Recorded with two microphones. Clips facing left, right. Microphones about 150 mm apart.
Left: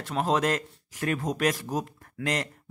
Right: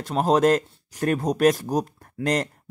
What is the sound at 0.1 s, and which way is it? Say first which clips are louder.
Speech: right 7 dB; 40° right (ahead or behind).